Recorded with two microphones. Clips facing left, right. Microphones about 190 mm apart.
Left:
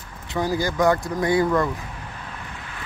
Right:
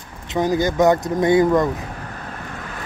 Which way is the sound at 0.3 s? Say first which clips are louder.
Right 5 dB; 20° right (ahead or behind).